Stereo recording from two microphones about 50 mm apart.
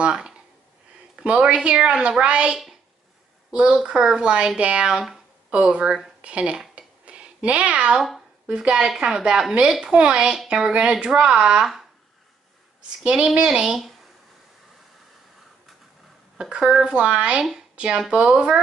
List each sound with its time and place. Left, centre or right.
0.0 s a sound: centre
1.4 s speech: centre
3.8 s speech: centre
7.1 s a sound: right
8.5 s speech: centre
9.9 s speech: right
13.0 s speech: centre
16.3 s speech: centre
17.4 s speech: centre
17.7 s speech: right